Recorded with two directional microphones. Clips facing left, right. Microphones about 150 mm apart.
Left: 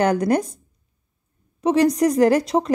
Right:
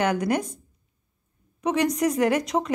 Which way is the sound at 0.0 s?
35° left (ahead or behind).